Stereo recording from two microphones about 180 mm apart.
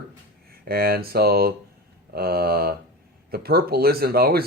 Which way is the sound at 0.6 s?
60° right (ahead or behind).